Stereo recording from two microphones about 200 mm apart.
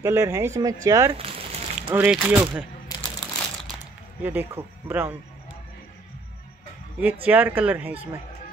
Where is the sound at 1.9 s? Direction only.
5° right (ahead or behind).